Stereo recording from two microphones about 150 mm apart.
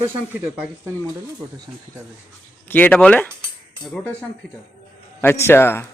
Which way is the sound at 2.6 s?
10° left (ahead or behind).